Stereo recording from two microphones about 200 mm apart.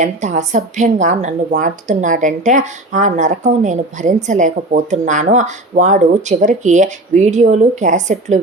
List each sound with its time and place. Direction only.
0.0 s a woman's voice: 35° right (ahead or behind)